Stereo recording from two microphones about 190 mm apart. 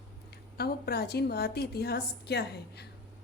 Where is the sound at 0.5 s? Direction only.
55° left (ahead or behind).